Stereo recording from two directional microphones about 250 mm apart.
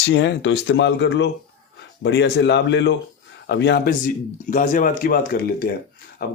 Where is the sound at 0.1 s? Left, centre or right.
Left.